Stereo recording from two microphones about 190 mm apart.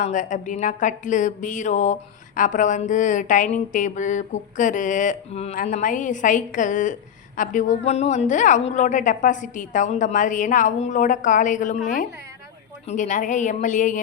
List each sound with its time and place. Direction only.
0.0 s a woman's voice: 40° left (ahead or behind)
12.9 s a woman's voice: 40° left (ahead or behind)